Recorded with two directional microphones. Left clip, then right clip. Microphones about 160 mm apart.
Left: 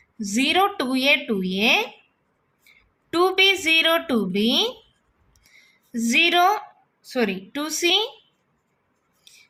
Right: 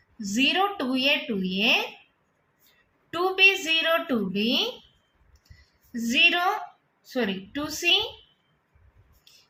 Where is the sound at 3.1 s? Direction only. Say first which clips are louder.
Left 2 dB; 65° left (ahead or behind).